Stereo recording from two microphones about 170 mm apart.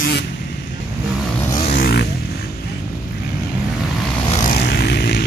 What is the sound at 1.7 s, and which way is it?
Vehicle, 60° left (ahead or behind).